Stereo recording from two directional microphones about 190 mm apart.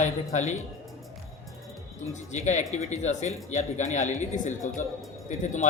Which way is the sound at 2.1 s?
40° left (ahead or behind).